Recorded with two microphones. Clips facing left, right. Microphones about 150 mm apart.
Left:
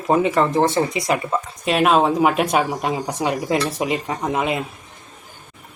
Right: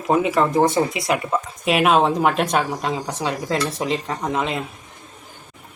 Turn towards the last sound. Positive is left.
turn(degrees=5)  # may be behind; listen again after turning